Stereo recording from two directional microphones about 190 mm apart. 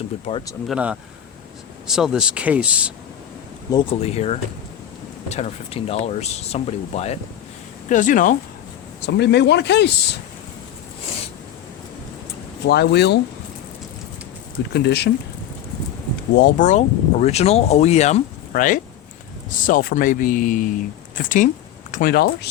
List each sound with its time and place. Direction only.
0.7 s speech: 5° right (ahead or behind)
3.7 s speech: 25° left (ahead or behind); by 8.4 s 45° left (ahead or behind)
9.0 s speech: 65° left (ahead or behind)
12.6 s speech: 60° left (ahead or behind)
14.7 s speech: 60° left (ahead or behind)
16.3 s speech: 45° left (ahead or behind)